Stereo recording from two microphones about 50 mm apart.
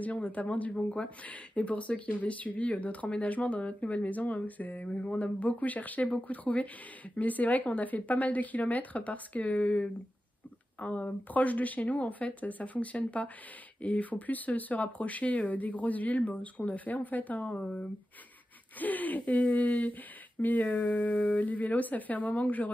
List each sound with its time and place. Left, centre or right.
0.0 s speech: left
4.8 s speech: left
18.8 s speech: left